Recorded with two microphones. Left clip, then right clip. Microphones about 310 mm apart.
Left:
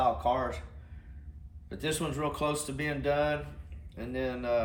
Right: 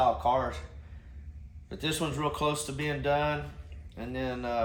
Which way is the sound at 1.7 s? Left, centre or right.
Centre.